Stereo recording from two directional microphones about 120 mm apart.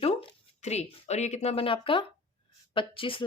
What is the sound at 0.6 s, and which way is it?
Speech, 65° left (ahead or behind).